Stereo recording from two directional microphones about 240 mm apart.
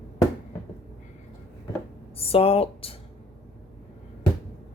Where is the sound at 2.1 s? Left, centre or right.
Left.